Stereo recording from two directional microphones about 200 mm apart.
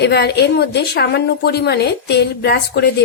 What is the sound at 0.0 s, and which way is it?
A woman's voice, 55° left (ahead or behind).